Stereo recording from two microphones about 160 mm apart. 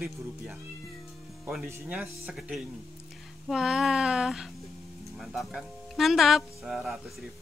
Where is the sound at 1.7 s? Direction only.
10° right (ahead or behind).